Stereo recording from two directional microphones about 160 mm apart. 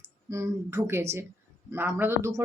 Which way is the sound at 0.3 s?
20° right (ahead or behind).